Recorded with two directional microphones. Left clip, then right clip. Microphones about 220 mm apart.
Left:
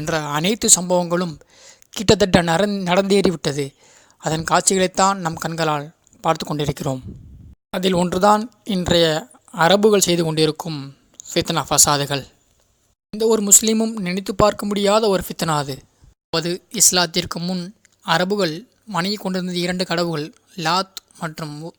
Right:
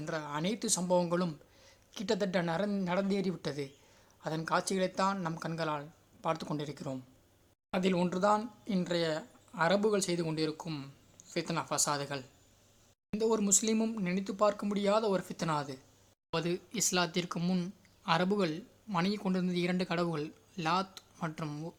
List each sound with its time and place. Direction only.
0.0 s speech: 35° left (ahead or behind)